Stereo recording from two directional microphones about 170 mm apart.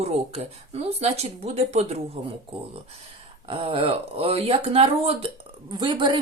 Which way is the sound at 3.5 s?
35° right (ahead or behind).